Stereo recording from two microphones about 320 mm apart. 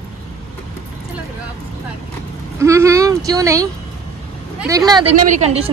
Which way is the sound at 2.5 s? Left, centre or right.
Centre.